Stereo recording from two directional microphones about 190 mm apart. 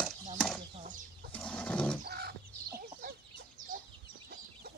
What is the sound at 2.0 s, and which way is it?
Chicken, 55° right (ahead or behind).